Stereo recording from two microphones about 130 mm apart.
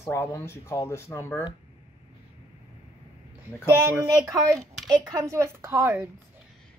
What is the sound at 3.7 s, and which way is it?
A woman's voice, 20° right (ahead or behind).